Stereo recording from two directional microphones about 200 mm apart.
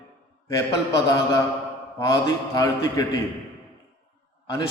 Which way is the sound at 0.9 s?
15° left (ahead or behind).